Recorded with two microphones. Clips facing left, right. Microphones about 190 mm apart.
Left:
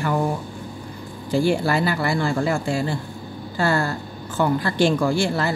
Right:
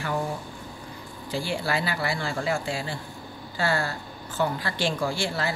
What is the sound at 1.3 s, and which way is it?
Speech, 50° left (ahead or behind).